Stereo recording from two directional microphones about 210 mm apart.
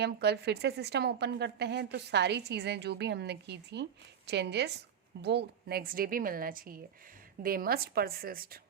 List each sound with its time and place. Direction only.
0.0 s a woman's voice: 50° right (ahead or behind)